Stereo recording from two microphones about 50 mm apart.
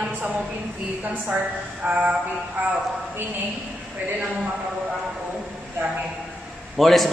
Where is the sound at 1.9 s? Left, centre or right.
Right.